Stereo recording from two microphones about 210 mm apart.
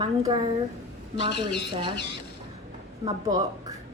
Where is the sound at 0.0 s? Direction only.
20° right (ahead or behind).